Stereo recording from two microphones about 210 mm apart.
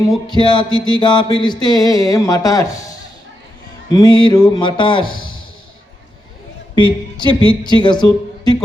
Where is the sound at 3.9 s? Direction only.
20° left (ahead or behind).